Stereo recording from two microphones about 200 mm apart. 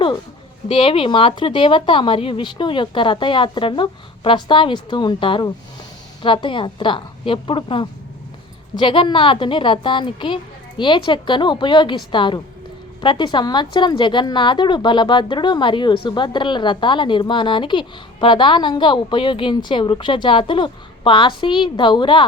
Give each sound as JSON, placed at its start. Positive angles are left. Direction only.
{"t": 0.7, "sound": "a woman's voice", "side_deg": 25}